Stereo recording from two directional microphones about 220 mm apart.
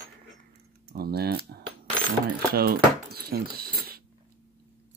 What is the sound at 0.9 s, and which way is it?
Speech, 45° right (ahead or behind).